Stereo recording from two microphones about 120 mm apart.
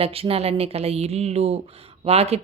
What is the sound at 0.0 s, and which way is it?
Speech, 55° right (ahead or behind).